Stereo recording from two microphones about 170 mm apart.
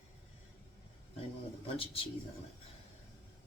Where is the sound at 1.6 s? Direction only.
35° left (ahead or behind).